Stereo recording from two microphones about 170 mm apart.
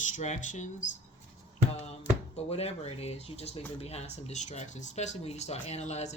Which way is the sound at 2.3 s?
35° left (ahead or behind).